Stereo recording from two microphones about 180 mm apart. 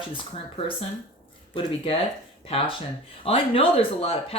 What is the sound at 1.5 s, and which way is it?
Speech, 30° left (ahead or behind).